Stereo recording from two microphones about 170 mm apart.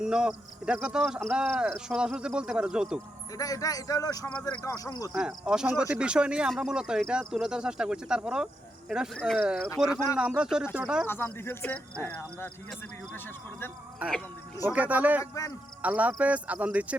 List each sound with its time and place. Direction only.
0.0 s speech: 5° right (ahead or behind)
3.3 s speech: 20° left (ahead or behind)
5.1 s speech: 5° right (ahead or behind)
11.0 s speech: 15° left (ahead or behind)
14.0 s speech: 10° right (ahead or behind)
15.2 s speech: 20° left (ahead or behind)
15.8 s speech: 10° right (ahead or behind)